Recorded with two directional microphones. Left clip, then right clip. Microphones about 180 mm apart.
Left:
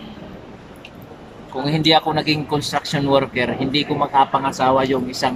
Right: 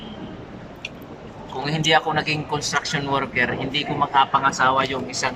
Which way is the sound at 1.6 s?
20° left (ahead or behind).